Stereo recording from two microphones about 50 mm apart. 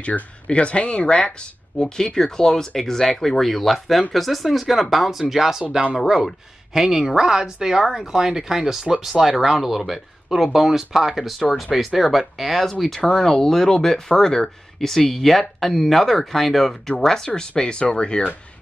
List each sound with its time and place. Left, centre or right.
0.0 s speech: left